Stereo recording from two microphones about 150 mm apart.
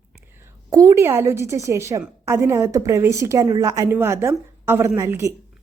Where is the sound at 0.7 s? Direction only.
20° right (ahead or behind).